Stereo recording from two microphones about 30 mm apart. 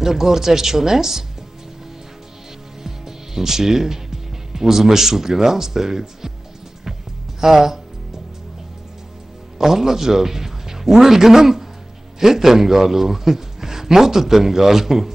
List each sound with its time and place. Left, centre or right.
0.0 s a man's voice: centre
2.8 s speech: centre
6.8 s music: centre
9.6 s a man's voice: centre